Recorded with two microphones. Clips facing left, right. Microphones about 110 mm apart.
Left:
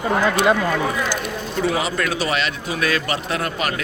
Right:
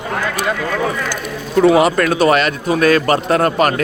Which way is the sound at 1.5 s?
50° right (ahead or behind).